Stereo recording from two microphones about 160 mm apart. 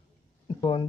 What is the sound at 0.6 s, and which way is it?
Speech, 30° left (ahead or behind).